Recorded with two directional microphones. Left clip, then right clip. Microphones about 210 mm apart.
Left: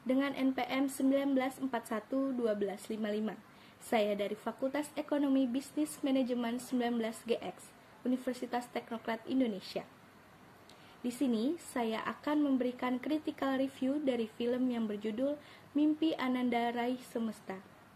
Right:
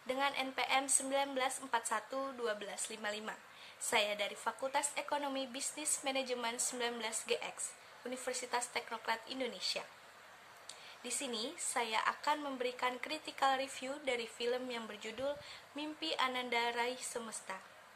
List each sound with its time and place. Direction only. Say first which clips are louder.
0.0 s a woman's voice: left 3 dB; 10° right (ahead or behind)
11.1 s a woman's voice: left 7 dB; 10° right (ahead or behind)